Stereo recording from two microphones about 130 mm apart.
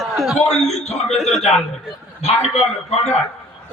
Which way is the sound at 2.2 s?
55° left (ahead or behind).